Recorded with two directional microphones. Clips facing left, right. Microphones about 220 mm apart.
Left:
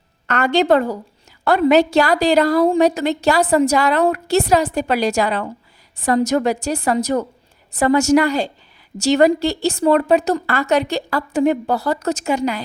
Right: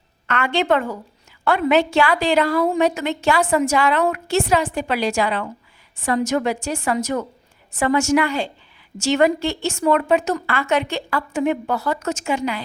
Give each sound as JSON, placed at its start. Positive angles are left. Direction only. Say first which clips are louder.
{"t": 0.3, "sound": "a woman's voice", "louder": "left 4 dB", "side_deg": 40}